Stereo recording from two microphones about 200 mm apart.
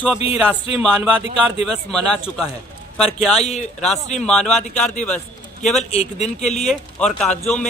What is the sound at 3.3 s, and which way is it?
Speech, 35° left (ahead or behind).